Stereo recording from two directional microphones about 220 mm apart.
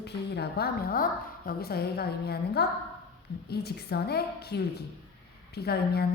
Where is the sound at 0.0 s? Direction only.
50° left (ahead or behind).